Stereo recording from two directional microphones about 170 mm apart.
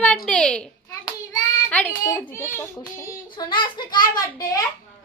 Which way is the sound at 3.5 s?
25° left (ahead or behind).